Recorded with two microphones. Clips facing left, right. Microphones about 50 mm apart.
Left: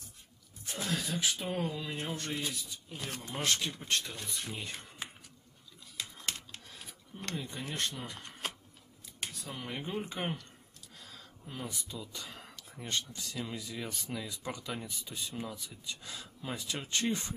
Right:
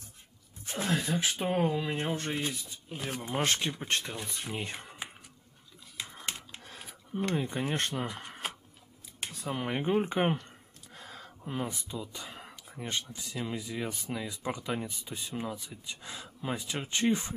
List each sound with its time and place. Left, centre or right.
0.7 s speech: right
3.3 s speech: right
6.2 s computer keyboard: centre
6.8 s a sound: centre
7.3 s speech: right
8.4 s scissors: centre
9.3 s speech: right
11.0 s a sound: right
12.0 s a sound: centre
13.1 s speech: centre